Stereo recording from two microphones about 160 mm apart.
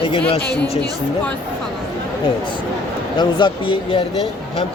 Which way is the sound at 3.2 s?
30° left (ahead or behind).